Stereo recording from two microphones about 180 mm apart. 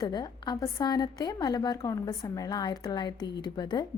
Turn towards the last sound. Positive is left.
turn(degrees=25)  # may be behind; listen again after turning